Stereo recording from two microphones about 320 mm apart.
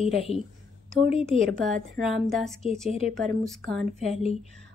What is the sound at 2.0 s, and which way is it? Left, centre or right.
Speech, centre.